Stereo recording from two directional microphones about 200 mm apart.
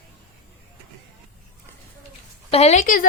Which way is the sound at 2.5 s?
30° left (ahead or behind).